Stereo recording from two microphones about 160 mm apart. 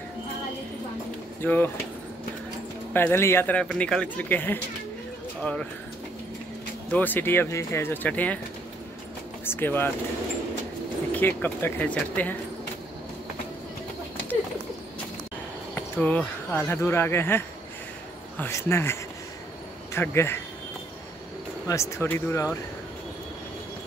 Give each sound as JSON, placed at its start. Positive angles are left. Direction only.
{"t": 1.4, "sound": "a man's voice", "side_deg": 15}
{"t": 2.9, "sound": "a man's voice", "side_deg": 15}
{"t": 6.9, "sound": "a man's voice", "side_deg": 10}
{"t": 9.4, "sound": "speech", "side_deg": 15}
{"t": 11.1, "sound": "a man's voice", "side_deg": 10}
{"t": 15.7, "sound": "a man's voice", "side_deg": 10}
{"t": 21.6, "sound": "a man's voice", "side_deg": 20}